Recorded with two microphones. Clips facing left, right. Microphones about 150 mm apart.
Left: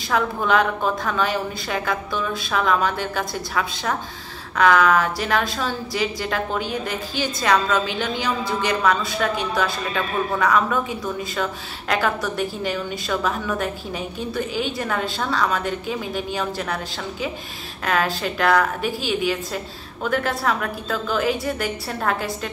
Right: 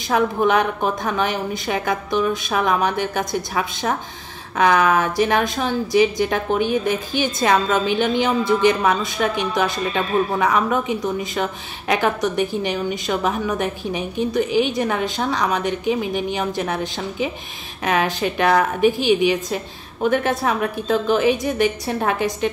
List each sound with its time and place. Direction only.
0.1 s a woman's voice: 20° right (ahead or behind)